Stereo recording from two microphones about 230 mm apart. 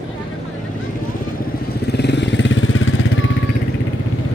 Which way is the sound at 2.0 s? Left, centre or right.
Left.